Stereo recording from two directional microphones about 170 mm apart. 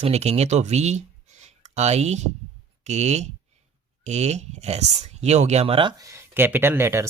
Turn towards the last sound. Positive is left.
turn(degrees=-15)  # may be behind; listen again after turning